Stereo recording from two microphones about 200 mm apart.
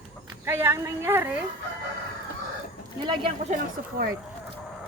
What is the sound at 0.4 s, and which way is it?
Speech, 10° right (ahead or behind).